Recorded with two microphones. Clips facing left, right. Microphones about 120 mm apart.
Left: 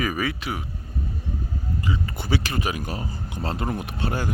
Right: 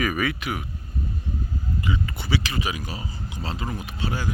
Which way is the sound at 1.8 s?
35° left (ahead or behind).